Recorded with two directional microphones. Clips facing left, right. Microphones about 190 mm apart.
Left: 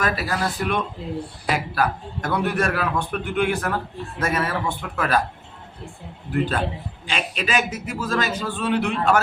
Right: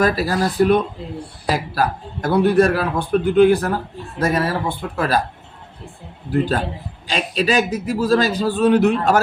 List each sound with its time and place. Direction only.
0.0 s a man's voice: 35° right (ahead or behind)
6.3 s a man's voice: 35° right (ahead or behind)